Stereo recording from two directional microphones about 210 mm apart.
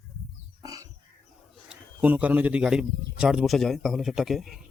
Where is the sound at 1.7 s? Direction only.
10° right (ahead or behind).